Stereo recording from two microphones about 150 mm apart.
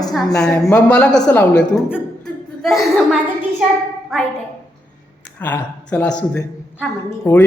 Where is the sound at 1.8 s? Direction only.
Centre (ahead or behind).